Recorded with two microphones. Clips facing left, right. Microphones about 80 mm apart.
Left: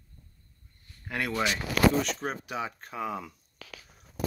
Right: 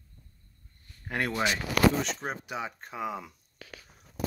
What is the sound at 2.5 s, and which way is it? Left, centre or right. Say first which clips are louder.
Speech: left 1 dB; centre.